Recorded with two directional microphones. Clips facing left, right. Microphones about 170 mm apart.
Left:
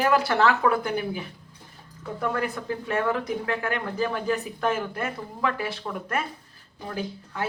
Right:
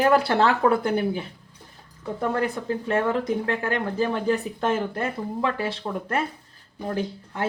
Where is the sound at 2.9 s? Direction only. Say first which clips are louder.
Right 3 dB; 25° right (ahead or behind).